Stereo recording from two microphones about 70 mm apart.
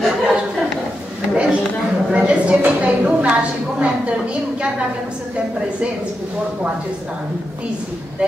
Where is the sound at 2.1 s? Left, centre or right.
Centre.